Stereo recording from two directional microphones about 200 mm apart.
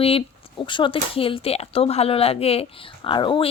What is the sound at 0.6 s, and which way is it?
Speech, 25° left (ahead or behind).